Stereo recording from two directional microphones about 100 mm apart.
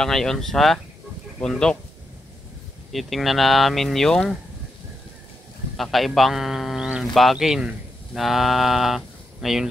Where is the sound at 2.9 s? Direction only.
Centre (ahead or behind).